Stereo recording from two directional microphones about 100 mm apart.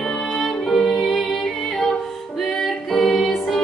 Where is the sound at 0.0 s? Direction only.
5° left (ahead or behind).